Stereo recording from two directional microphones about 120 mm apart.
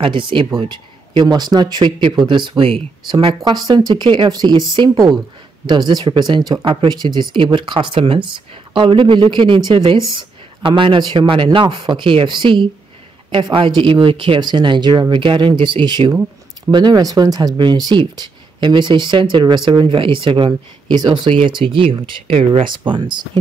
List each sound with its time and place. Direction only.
0.0 s speech: 45° right (ahead or behind)
10.6 s speech: 45° right (ahead or behind)
16.1 s a sound: 20° right (ahead or behind)
16.7 s speech: 35° right (ahead or behind)